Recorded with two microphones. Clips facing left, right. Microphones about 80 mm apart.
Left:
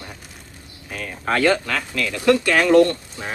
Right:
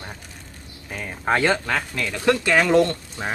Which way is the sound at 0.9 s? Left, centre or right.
Centre.